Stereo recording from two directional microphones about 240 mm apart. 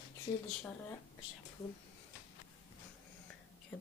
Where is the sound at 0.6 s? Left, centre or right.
Centre.